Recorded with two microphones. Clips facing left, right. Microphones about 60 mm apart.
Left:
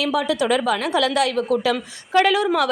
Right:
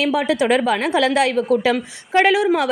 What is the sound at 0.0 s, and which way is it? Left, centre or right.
A woman's voice, right.